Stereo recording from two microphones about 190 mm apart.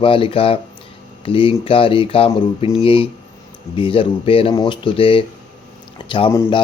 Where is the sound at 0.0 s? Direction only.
30° left (ahead or behind).